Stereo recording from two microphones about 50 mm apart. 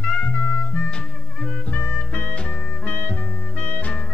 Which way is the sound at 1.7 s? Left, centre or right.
Left.